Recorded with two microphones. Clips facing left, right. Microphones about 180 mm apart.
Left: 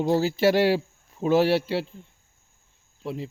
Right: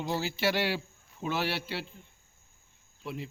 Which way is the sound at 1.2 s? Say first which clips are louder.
Left 12 dB; 40° left (ahead or behind).